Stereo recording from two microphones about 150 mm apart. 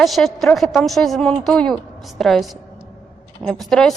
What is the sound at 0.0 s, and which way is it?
A woman's voice, centre (ahead or behind).